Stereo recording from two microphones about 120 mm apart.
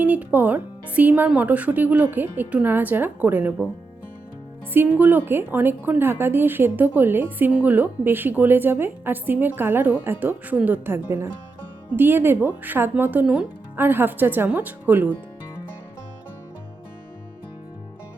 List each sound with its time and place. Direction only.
0.0 s a woman's voice: 15° right (ahead or behind)
4.7 s a woman's voice: 15° right (ahead or behind)